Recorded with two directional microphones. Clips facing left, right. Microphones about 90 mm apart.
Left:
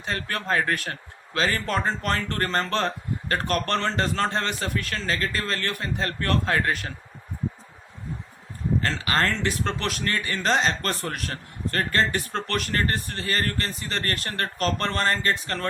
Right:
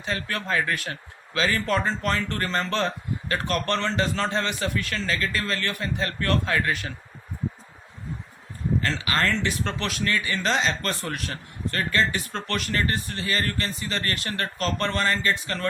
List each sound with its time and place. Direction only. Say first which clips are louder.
0.0 s a man's voice: even; 40° left (ahead or behind)
8.8 s a man's voice: left 1 dB; 35° left (ahead or behind)